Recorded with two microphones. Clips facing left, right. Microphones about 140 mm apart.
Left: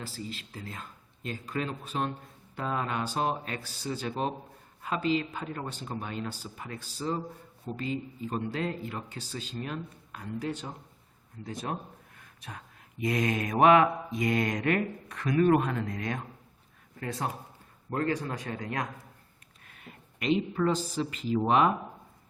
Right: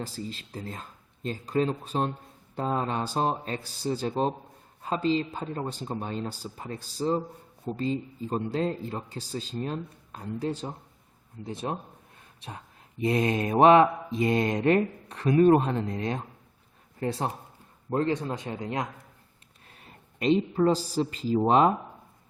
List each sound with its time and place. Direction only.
0.3 s a man's voice: 35° right (ahead or behind)
19.6 s a woman's voice: 30° right (ahead or behind)